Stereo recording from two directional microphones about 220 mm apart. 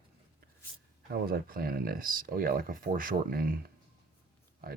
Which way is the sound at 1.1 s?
40° right (ahead or behind).